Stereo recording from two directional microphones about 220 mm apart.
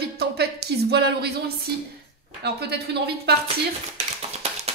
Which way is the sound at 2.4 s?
50° right (ahead or behind).